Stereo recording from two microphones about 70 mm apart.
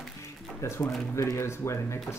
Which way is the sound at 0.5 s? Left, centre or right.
Left.